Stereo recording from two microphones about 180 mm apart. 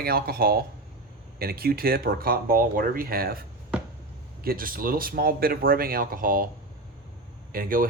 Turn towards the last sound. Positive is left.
turn(degrees=-50)  # may be behind; listen again after turning